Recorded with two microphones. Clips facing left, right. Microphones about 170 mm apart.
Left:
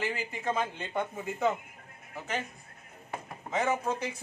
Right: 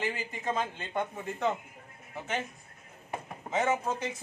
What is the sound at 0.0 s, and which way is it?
Speech, centre (ahead or behind).